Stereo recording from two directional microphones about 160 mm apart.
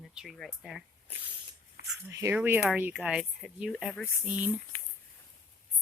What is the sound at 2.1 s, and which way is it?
A woman's voice, 15° right (ahead or behind).